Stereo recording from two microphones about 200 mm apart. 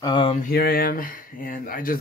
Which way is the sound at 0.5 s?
50° left (ahead or behind).